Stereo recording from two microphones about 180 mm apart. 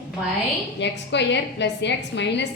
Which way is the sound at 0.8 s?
75° left (ahead or behind).